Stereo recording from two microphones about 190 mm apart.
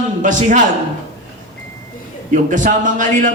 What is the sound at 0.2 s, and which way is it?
Speech, 40° right (ahead or behind).